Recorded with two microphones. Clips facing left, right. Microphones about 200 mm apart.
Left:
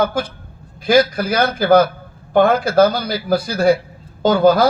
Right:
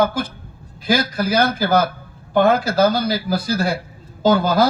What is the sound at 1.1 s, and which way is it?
Speech, 55° left (ahead or behind).